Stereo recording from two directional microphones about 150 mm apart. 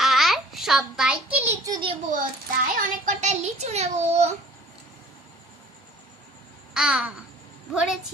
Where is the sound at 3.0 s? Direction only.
50° right (ahead or behind).